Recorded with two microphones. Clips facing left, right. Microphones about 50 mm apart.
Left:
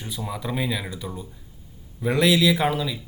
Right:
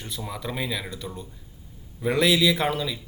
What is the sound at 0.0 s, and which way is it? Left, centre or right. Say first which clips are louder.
A man's voice: left 2 dB; centre.